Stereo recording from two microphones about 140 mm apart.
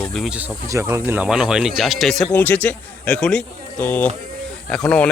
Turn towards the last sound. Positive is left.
turn(degrees=10)  # may be behind; listen again after turning